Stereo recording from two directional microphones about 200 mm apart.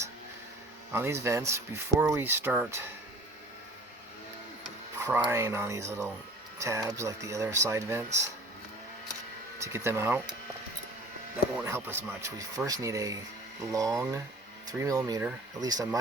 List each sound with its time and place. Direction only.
0.9 s speech: 15° right (ahead or behind)
4.9 s speech: 10° right (ahead or behind)
9.6 s speech: 15° right (ahead or behind)
11.6 s speech: 10° right (ahead or behind)